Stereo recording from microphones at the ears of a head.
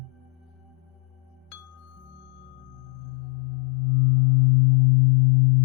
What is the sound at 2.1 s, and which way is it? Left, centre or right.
Singing bowl, left.